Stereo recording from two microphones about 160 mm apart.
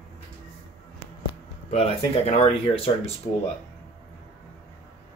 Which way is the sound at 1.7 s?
40° left (ahead or behind).